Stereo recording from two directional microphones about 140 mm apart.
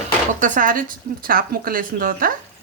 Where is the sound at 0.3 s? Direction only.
65° right (ahead or behind).